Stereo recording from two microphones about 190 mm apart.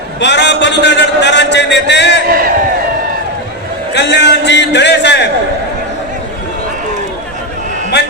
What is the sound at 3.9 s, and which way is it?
A man's voice, 65° left (ahead or behind).